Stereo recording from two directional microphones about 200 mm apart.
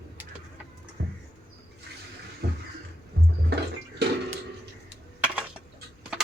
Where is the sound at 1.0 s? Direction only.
60° right (ahead or behind).